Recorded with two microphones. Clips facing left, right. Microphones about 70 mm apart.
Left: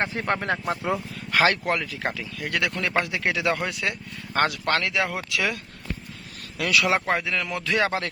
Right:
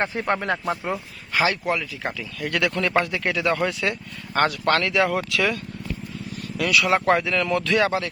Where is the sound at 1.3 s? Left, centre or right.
Left.